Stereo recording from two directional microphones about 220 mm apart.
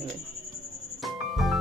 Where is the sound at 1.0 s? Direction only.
Centre (ahead or behind).